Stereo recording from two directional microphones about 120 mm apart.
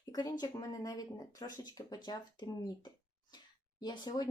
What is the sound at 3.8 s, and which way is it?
Speech, 35° left (ahead or behind).